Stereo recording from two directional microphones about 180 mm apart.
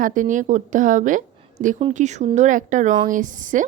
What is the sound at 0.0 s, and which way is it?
A woman's voice, 45° right (ahead or behind).